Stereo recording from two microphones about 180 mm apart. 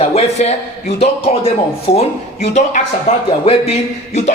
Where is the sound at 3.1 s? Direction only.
35° left (ahead or behind).